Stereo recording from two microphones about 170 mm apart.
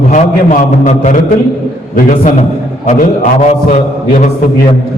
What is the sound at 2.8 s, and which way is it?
A man's voice, 50° left (ahead or behind).